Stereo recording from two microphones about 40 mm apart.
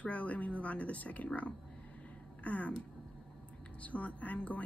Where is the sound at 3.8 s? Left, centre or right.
Left.